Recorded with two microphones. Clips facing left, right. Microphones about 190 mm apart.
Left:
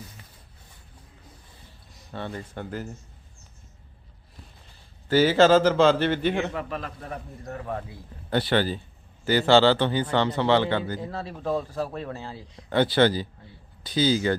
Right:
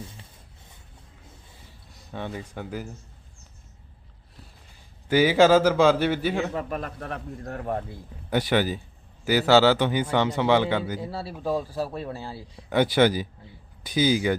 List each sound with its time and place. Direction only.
2.1 s a man's voice: 10° right (ahead or behind)
5.0 s a man's voice: 15° right (ahead or behind)
6.5 s a man's voice: 40° right (ahead or behind)
8.3 s a man's voice: 10° right (ahead or behind)